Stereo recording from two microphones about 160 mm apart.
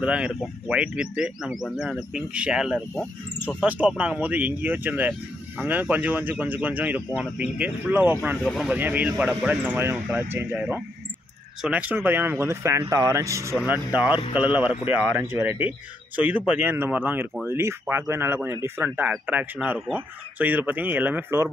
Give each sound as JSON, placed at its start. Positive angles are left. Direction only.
{"t": 0.0, "sound": "speech", "side_deg": -5}